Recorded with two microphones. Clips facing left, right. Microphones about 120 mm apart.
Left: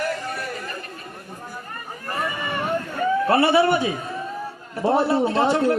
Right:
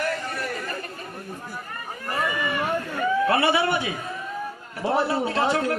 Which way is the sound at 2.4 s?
30° left (ahead or behind).